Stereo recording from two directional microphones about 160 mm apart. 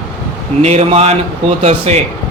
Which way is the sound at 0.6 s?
45° right (ahead or behind).